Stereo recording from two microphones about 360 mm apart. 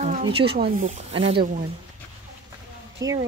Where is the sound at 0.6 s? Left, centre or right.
Centre.